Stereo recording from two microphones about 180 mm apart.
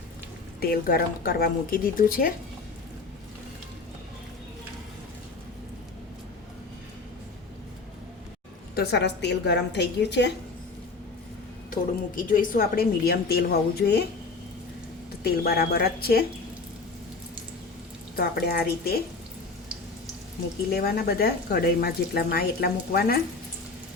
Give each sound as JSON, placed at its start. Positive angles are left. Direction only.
{"t": 0.6, "sound": "a woman's voice", "side_deg": 55}
{"t": 8.7, "sound": "a woman's voice", "side_deg": 65}
{"t": 11.7, "sound": "speech", "side_deg": 50}
{"t": 15.2, "sound": "speech", "side_deg": 60}
{"t": 18.2, "sound": "speech", "side_deg": 60}
{"t": 20.7, "sound": "speech", "side_deg": 60}